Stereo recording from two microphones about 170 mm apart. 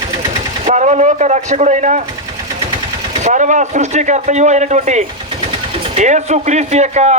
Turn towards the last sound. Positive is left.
turn(degrees=-40)  # may be behind; listen again after turning